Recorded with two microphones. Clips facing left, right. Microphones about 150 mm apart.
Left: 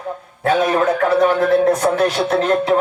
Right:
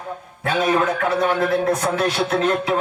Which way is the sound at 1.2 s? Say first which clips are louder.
Left 5 dB; 40° left (ahead or behind).